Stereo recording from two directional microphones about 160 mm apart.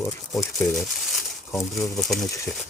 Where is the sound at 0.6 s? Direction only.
Centre (ahead or behind).